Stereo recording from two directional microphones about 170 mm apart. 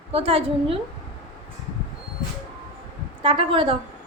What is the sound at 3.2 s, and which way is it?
Speech, 30° right (ahead or behind).